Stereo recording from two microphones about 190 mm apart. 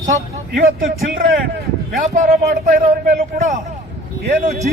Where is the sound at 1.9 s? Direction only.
40° right (ahead or behind).